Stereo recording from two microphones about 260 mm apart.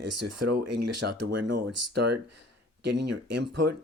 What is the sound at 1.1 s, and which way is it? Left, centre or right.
Speech, right.